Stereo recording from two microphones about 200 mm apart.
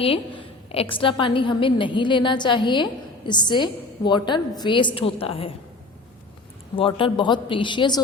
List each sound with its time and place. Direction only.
0.0 s a woman's voice: 30° left (ahead or behind)
6.7 s a woman's voice: 25° left (ahead or behind)